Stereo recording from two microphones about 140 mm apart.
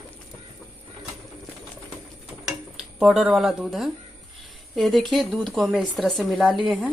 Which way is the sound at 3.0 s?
5° right (ahead or behind).